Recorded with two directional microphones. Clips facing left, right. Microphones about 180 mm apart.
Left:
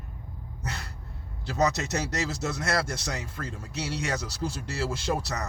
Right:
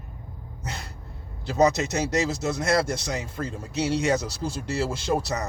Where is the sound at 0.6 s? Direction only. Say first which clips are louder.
Right 1 dB; 20° right (ahead or behind).